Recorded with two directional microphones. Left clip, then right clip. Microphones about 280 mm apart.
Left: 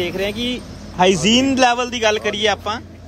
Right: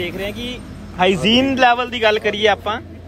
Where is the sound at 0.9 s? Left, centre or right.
Centre.